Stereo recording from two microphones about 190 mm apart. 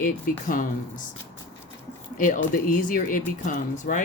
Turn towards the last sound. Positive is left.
turn(degrees=45)  # may be behind; listen again after turning